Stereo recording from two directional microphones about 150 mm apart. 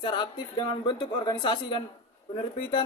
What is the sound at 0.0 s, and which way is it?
Speech, 35° left (ahead or behind).